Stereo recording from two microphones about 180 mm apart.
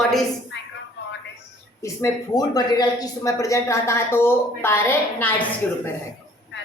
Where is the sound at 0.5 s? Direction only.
90° left.